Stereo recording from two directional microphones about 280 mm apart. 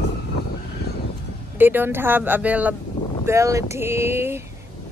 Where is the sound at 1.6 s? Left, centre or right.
Centre.